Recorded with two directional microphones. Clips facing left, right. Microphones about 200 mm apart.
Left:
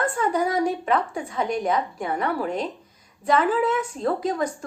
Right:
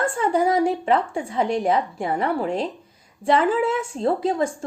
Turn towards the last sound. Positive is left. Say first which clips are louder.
# right 3 dB
turn(degrees=-25)  # may be behind; listen again after turning